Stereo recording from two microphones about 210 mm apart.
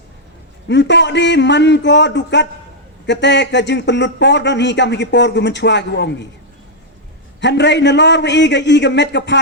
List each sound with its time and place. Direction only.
0.7 s speech: 55° left (ahead or behind)
7.4 s speech: 55° left (ahead or behind)